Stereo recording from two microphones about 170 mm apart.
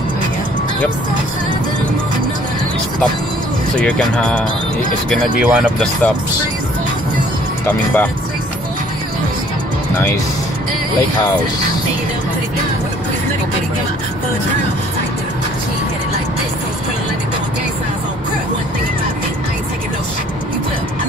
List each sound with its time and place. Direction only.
3.7 s speech: 5° left (ahead or behind)